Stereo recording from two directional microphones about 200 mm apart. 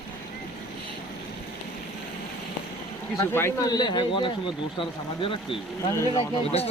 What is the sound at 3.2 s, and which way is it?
Speech, 15° left (ahead or behind).